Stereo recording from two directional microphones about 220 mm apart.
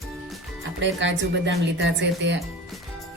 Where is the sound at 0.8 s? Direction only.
55° right (ahead or behind).